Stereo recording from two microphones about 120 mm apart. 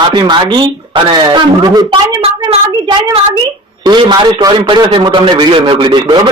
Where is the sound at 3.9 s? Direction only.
35° right (ahead or behind).